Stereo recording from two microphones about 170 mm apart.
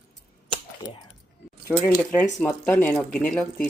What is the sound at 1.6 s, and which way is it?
Speech, 15° left (ahead or behind).